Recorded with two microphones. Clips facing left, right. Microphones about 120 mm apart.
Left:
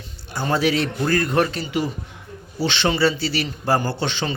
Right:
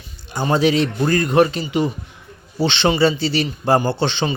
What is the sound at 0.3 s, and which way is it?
A man's voice, 20° right (ahead or behind).